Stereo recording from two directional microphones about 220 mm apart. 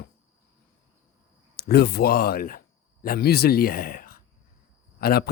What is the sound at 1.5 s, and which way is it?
Speech, 45° left (ahead or behind).